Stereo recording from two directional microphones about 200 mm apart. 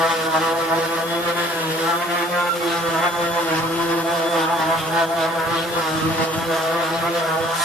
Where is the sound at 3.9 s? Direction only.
5° left (ahead or behind).